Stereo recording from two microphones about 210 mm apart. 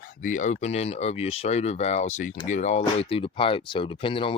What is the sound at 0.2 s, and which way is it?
Speech, 40° left (ahead or behind).